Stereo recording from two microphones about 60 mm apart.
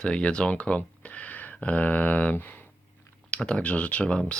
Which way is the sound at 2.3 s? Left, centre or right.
Left.